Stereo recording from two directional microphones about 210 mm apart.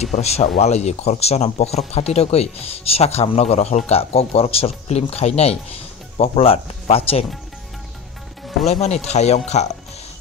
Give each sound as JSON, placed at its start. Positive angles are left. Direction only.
{"t": 0.0, "sound": "speech", "side_deg": 30}
{"t": 8.6, "sound": "speech", "side_deg": 30}